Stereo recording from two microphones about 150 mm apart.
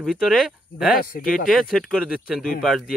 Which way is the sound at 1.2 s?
75° left (ahead or behind).